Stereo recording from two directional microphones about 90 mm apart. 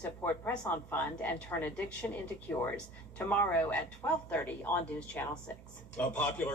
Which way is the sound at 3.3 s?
20° left (ahead or behind).